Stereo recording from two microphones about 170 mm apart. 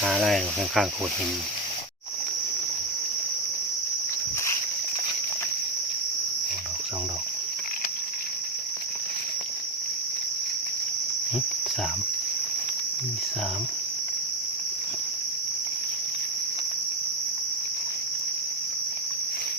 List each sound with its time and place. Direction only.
0.0 s speech: 5° right (ahead or behind)